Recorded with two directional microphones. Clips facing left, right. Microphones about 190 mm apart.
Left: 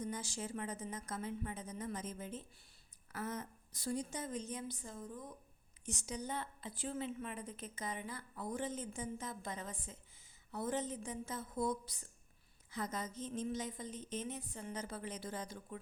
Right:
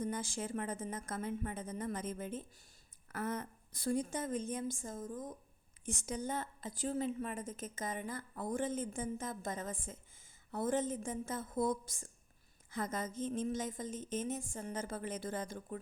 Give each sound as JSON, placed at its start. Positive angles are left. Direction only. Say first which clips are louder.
{"t": 0.0, "sound": "a woman's voice", "louder": "right 4 dB", "side_deg": -55}